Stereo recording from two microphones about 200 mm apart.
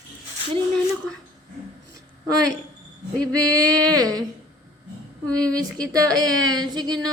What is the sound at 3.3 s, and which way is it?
Female singing, 15° right (ahead or behind).